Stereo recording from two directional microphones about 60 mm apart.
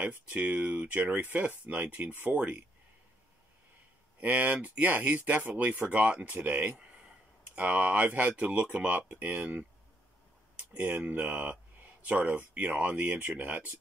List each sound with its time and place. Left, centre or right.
0.0 s speech: right
4.2 s speech: right
10.5 s a sound: right
11.0 s speech: centre